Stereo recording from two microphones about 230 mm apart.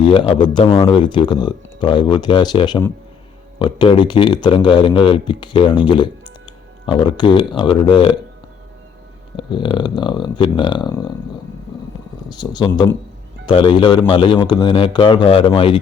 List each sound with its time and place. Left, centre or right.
0.0 s speech: left
9.3 s speech: left
12.3 s speech: centre